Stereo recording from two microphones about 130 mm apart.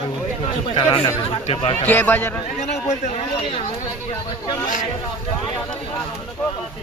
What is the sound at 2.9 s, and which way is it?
Speech, 55° left (ahead or behind).